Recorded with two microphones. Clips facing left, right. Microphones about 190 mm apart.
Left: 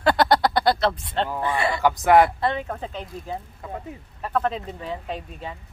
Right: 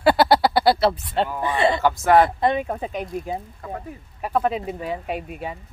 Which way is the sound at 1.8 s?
15° left (ahead or behind).